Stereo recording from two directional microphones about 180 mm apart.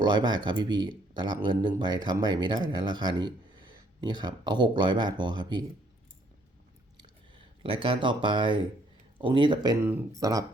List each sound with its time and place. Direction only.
0.0 s speech: 25° right (ahead or behind)
6.9 s a sound: 30° right (ahead or behind)
9.2 s speech: 25° right (ahead or behind)